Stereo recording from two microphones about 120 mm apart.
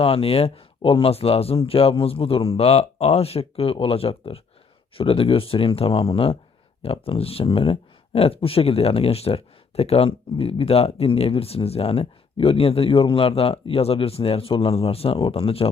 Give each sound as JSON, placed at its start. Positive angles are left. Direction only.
{"t": 0.0, "sound": "speech", "side_deg": 50}